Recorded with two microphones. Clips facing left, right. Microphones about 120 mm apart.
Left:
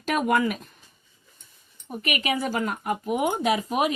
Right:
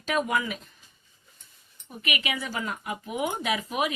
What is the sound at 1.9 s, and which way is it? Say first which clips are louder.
A woman's voice: left 5 dB; 40° left (ahead or behind).